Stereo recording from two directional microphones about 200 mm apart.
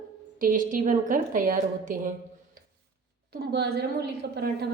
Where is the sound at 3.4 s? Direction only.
55° right (ahead or behind).